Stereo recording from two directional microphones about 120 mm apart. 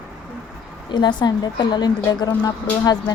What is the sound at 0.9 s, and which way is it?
Speech, 40° left (ahead or behind).